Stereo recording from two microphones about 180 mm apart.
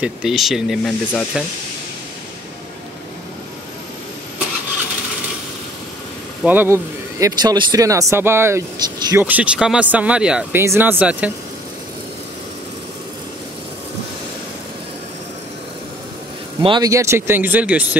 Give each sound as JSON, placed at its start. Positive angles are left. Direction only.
{"t": 0.0, "sound": "speech", "side_deg": 0}
{"t": 6.4, "sound": "speech", "side_deg": -10}
{"t": 16.6, "sound": "speech", "side_deg": -25}